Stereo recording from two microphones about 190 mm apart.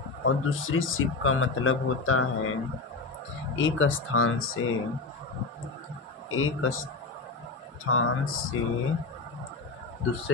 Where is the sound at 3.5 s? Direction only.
80° left.